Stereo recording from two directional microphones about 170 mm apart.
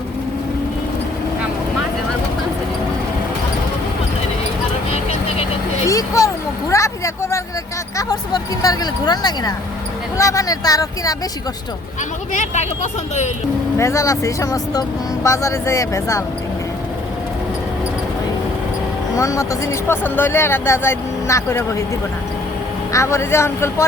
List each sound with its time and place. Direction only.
5.8 s vehicle: 20° left (ahead or behind)
7.9 s speech: 20° left (ahead or behind)
12.3 s speech: 45° left (ahead or behind)
13.7 s speech: 15° left (ahead or behind)
19.1 s speech: 20° left (ahead or behind)
22.9 s speech: 15° left (ahead or behind)